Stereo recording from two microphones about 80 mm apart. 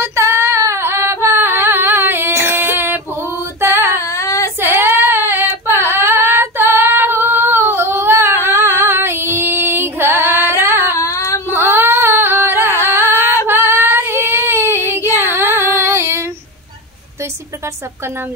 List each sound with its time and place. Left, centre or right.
0.0 s female singing: right
4.1 s child singing: left
4.6 s child singing: right
5.3 s female singing: right
11.0 s a sound: left
11.5 s female singing: right
15.0 s child singing: right